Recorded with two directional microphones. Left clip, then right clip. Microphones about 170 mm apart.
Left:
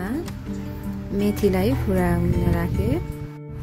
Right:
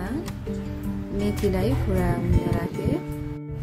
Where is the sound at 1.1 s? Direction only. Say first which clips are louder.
Left 4 dB; 15° left (ahead or behind).